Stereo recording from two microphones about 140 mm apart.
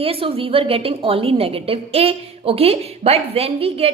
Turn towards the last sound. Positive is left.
turn(degrees=-45)  # may be behind; listen again after turning